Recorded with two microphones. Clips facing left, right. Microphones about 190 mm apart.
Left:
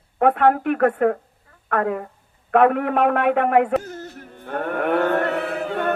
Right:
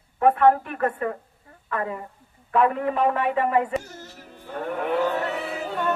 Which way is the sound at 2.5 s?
65° left (ahead or behind).